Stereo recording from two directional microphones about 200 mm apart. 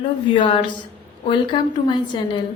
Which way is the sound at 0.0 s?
25° left (ahead or behind).